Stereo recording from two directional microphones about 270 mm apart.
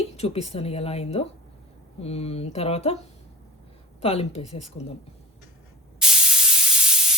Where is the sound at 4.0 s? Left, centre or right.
Left.